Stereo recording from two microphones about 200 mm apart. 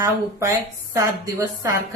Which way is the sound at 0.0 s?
15° right (ahead or behind).